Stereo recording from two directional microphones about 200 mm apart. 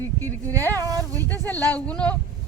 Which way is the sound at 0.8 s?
15° right (ahead or behind).